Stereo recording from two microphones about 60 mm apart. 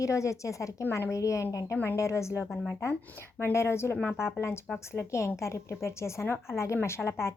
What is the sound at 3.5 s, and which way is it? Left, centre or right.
Speech, left.